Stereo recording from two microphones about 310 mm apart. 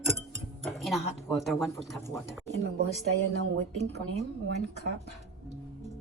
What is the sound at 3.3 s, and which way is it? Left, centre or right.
Speech, right.